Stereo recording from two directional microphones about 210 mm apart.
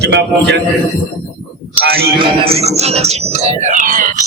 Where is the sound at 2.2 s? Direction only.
25° right (ahead or behind).